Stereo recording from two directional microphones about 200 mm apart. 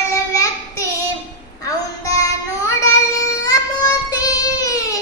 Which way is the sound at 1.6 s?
15° left (ahead or behind).